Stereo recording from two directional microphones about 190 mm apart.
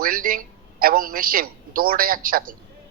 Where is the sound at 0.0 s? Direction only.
50° right (ahead or behind).